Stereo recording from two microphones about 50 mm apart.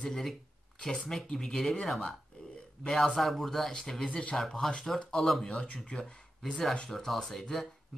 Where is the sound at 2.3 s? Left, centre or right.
Left.